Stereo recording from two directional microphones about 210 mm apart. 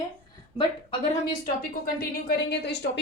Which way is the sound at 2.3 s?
55° left (ahead or behind).